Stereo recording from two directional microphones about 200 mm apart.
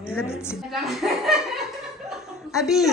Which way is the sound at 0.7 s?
Centre (ahead or behind).